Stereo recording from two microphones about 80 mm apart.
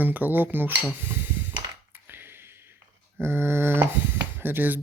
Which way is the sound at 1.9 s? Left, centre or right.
Right.